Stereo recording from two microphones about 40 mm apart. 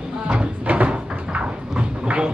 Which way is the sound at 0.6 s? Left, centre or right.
Right.